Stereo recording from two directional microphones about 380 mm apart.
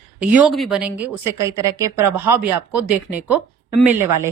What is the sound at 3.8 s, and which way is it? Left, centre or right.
Speech, centre.